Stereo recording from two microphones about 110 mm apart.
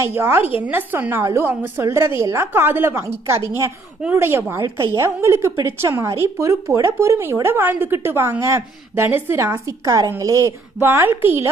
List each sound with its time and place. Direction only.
0.0 s a woman's voice: 25° right (ahead or behind)
10.8 s a woman's voice: 20° right (ahead or behind)